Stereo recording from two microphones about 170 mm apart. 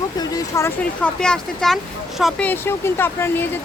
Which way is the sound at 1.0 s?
5° left (ahead or behind).